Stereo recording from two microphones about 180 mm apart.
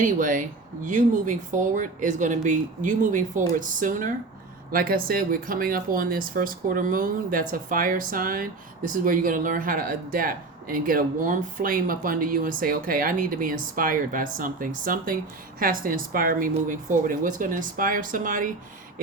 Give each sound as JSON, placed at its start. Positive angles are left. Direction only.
{"t": 0.0, "sound": "speech", "side_deg": -45}